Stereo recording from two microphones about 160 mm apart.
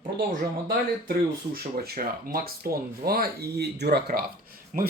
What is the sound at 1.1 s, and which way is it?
Speech, 75° right (ahead or behind).